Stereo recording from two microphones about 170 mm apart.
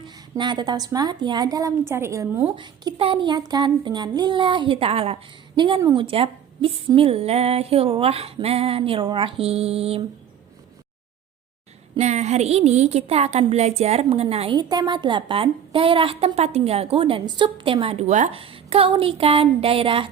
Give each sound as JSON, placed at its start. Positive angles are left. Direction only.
{"t": 0.0, "sound": "a woman's voice", "side_deg": -25}
{"t": 2.6, "sound": "a woman's voice", "side_deg": -25}
{"t": 11.9, "sound": "a woman's voice", "side_deg": -40}